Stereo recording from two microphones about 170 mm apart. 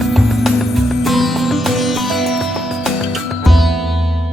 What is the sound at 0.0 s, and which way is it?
Music, centre (ahead or behind).